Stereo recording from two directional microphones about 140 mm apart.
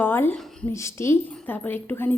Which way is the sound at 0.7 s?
20° left (ahead or behind).